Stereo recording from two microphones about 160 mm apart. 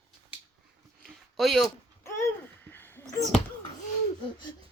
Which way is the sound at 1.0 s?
Centre (ahead or behind).